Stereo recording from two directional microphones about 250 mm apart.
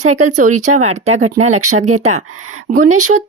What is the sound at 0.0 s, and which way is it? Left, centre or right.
Speech, right.